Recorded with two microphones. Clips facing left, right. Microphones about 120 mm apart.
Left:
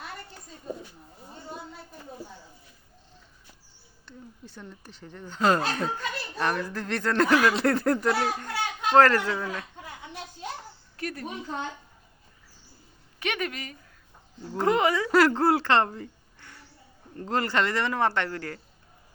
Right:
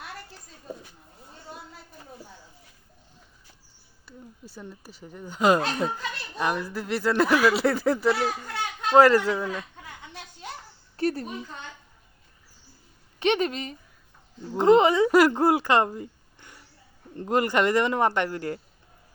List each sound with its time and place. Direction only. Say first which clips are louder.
4.0 s speech: even; 10° right (ahead or behind)
9.0 s speech: right 3 dB; 10° right (ahead or behind)
10.9 s a sound: right 8 dB; 30° right (ahead or behind)
13.1 s a woman's voice: right 7 dB; 30° right (ahead or behind)